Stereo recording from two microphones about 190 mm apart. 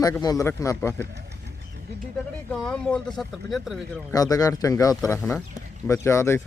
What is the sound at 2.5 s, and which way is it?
Speech, 5° left (ahead or behind).